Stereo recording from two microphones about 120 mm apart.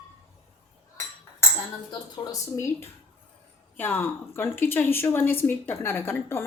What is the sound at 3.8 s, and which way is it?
A woman's voice, 15° left (ahead or behind).